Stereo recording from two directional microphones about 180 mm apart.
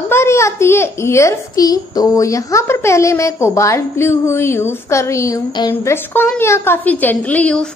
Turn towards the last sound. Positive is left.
turn(degrees=10)  # may be behind; listen again after turning